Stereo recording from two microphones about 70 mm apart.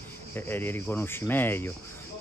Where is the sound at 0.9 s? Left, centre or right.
Left.